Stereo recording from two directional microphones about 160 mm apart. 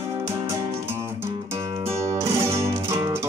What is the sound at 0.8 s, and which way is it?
Music, 15° right (ahead or behind).